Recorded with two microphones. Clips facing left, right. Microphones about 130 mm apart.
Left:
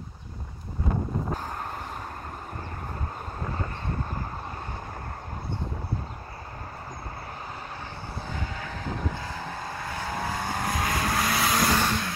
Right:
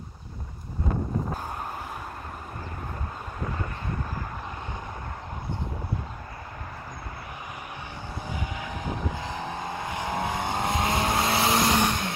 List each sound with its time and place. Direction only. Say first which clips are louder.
8.3 s vehicle: right 2 dB; 15° right (ahead or behind)